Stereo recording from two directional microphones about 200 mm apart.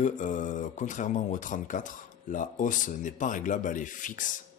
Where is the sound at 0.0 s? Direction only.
40° left (ahead or behind).